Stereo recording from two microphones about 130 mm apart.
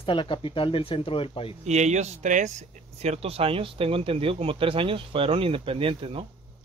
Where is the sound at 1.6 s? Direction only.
60° right (ahead or behind); by 6.3 s 45° right (ahead or behind).